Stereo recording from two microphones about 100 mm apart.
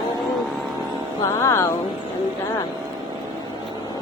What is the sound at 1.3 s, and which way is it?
Music, 30° left (ahead or behind).